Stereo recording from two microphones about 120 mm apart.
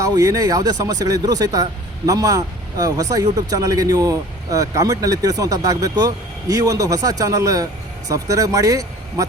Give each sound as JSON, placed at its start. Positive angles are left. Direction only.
{"t": 0.0, "sound": "speech", "side_deg": -30}